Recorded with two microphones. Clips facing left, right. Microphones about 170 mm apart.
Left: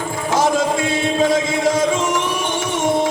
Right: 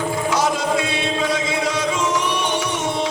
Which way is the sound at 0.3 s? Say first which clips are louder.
Left 5 dB; 50° left (ahead or behind).